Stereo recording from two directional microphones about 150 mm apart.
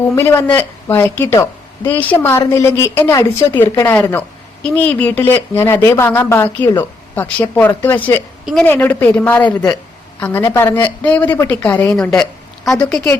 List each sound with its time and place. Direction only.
0.2 s a woman's voice: 15° left (ahead or behind)